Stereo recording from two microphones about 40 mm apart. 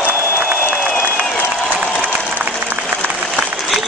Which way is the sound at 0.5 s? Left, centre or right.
Right.